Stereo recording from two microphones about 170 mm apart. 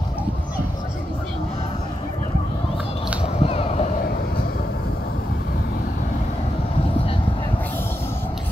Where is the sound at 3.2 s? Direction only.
35° left (ahead or behind).